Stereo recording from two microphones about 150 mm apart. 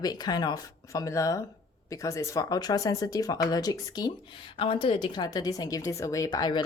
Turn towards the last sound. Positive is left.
turn(degrees=30)  # may be behind; listen again after turning